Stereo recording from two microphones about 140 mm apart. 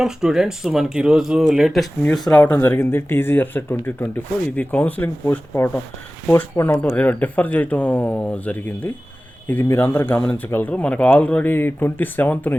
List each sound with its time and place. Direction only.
0.0 s speech: 5° right (ahead or behind)
2.3 s speech: 10° left (ahead or behind)